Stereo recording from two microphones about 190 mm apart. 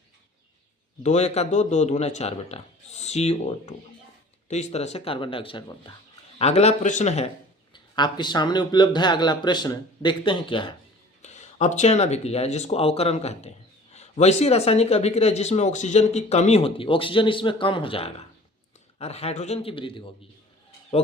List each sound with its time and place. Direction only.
1.0 s speech: 35° left (ahead or behind)
7.7 s speech: 25° left (ahead or behind)
11.2 s speech: 35° left (ahead or behind)